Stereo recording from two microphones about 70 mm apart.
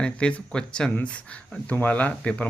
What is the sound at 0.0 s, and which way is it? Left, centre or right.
A man's voice, centre.